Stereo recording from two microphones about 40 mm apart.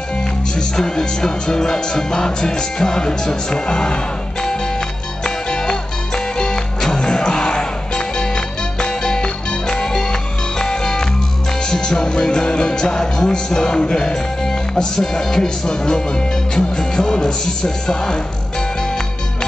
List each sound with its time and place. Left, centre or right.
0.6 s music: centre